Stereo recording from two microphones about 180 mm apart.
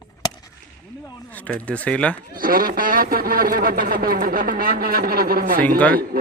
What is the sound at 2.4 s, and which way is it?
Speech, 50° right (ahead or behind).